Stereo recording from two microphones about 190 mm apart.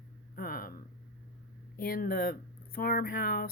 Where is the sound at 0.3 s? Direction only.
50° left (ahead or behind).